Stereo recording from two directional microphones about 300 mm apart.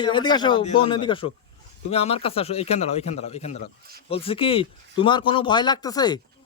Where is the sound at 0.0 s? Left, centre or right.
Centre.